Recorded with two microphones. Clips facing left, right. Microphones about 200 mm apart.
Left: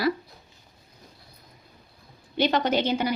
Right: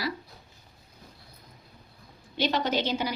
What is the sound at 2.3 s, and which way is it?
Speech, 55° left (ahead or behind).